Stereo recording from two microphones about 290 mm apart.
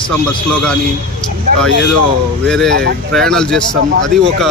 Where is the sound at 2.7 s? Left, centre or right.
Right.